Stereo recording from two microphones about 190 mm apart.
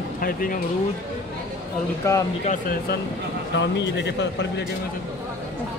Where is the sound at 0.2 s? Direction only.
50° left (ahead or behind).